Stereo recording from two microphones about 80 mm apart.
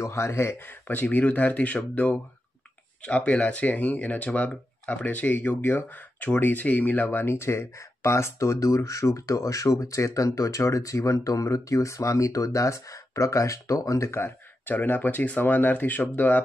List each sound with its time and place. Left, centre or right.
0.0 s speech: left; by 1.8 s centre
3.1 s speech: centre